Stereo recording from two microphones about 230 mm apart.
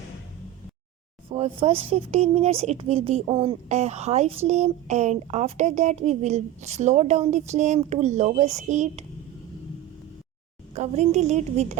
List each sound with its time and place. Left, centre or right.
1.3 s speech: right
10.8 s speech: right